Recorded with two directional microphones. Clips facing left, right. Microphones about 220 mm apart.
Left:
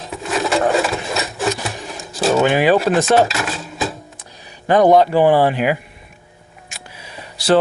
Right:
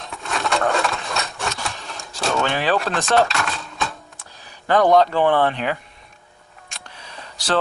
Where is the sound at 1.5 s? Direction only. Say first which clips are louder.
Left 7 dB; 15° left (ahead or behind).